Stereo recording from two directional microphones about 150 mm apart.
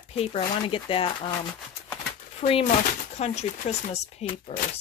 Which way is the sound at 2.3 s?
40° left (ahead or behind).